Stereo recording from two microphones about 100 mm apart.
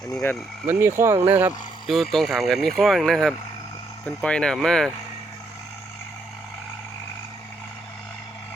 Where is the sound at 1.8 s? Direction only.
Centre (ahead or behind).